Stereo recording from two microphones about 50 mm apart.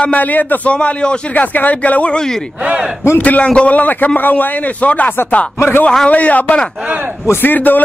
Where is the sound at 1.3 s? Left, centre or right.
Left.